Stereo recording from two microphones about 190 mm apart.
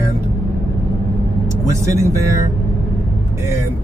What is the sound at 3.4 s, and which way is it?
Speech, 15° right (ahead or behind).